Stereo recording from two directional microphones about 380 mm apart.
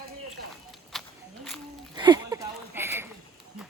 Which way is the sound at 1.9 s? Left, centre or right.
Centre.